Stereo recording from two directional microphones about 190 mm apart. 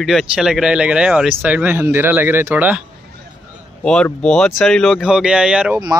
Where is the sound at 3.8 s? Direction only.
5° left (ahead or behind).